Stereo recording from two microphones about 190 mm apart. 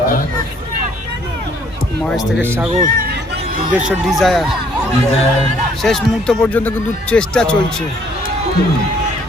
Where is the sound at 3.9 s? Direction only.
Centre (ahead or behind).